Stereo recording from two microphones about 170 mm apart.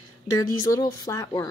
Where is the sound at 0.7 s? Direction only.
20° left (ahead or behind).